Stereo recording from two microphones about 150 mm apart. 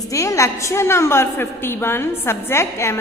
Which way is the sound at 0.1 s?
20° left (ahead or behind).